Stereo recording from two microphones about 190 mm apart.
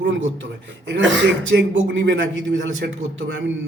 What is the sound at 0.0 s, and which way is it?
A man's voice, 75° right (ahead or behind).